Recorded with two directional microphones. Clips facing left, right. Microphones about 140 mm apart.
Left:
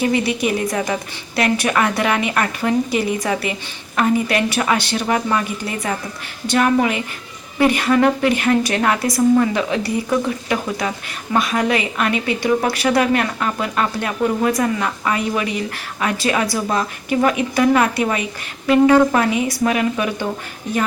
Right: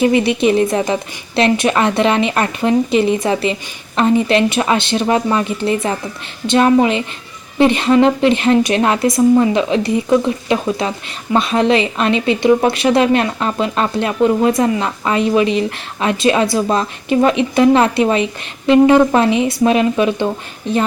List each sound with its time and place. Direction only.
0.0 s speech: 20° right (ahead or behind)